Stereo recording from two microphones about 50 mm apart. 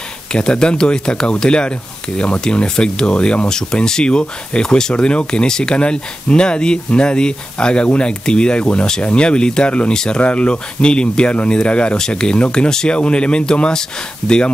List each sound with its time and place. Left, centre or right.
0.3 s speech: centre